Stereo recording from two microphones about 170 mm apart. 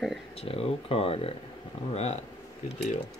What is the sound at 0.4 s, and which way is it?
Speech, 35° left (ahead or behind).